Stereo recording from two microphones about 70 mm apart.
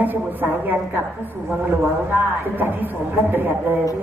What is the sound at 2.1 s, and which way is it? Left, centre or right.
A man's voice, right.